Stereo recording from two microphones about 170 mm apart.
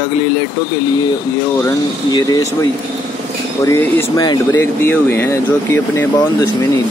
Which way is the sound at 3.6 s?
20° left (ahead or behind).